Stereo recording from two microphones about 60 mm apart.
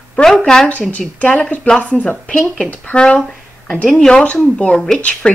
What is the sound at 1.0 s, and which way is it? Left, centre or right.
Speech, left.